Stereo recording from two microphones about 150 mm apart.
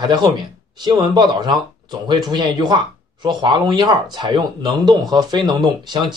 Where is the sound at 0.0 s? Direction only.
30° right (ahead or behind).